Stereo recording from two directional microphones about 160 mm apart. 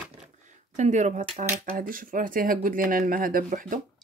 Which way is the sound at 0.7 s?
45° right (ahead or behind).